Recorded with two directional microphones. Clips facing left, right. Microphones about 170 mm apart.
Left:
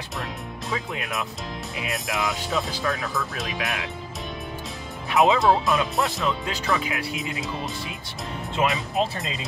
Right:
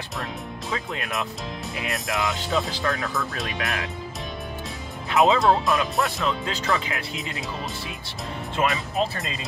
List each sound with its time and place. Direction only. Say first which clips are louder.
0.7 s speech: even; centre (ahead or behind)
5.1 s speech: even; 20° left (ahead or behind)
5.4 s speech: even; centre (ahead or behind)
8.5 s speech: even; centre (ahead or behind)